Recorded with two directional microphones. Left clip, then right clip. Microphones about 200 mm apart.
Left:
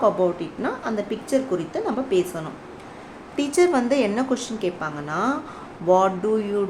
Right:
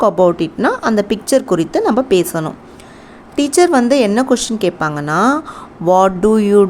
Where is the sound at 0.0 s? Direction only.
50° right (ahead or behind).